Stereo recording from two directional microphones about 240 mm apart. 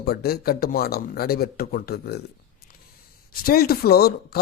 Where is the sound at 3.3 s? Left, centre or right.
Left.